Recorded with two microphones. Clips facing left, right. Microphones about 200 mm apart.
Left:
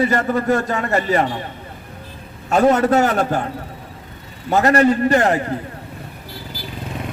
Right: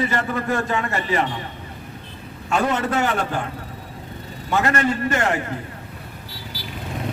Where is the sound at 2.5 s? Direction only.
40° left (ahead or behind).